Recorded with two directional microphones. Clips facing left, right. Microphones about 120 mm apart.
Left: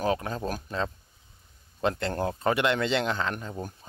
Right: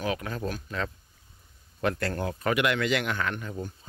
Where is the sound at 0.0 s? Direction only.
30° left (ahead or behind).